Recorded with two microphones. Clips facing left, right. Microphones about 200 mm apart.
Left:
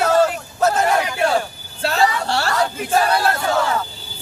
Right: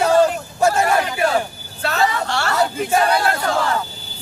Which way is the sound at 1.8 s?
30° left (ahead or behind).